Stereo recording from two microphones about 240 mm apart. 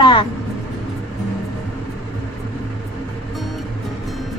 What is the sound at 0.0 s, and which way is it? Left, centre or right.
Vehicle, centre.